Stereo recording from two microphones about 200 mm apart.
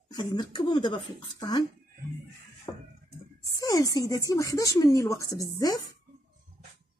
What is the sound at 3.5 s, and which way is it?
Speech, 20° left (ahead or behind).